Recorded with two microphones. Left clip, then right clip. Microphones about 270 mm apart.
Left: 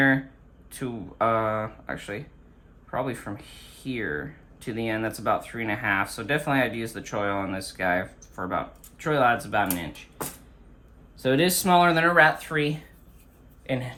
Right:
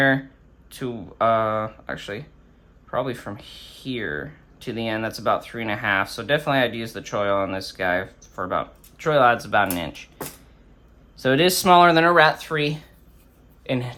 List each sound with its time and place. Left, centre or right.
0.7 s speech: centre
11.2 s speech: right